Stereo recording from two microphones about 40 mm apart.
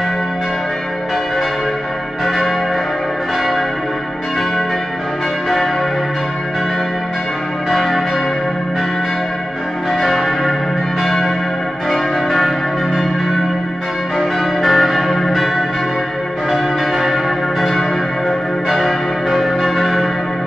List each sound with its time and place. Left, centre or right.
2.2 s church bell: centre
7.7 s church bell: centre
10.0 s church bell: centre
14.6 s change ringing: centre
16.5 s church bell: centre
18.7 s change ringing: centre